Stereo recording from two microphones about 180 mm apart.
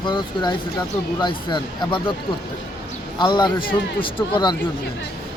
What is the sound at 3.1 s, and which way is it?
Speech, 25° left (ahead or behind).